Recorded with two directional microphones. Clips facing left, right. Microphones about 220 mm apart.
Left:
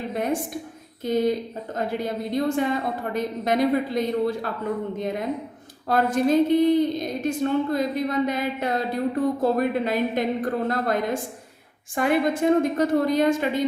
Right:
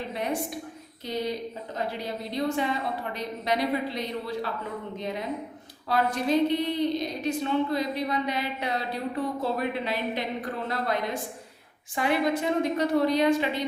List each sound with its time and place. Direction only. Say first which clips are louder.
1.0 s a woman's voice: left 8 dB; 50° left (ahead or behind)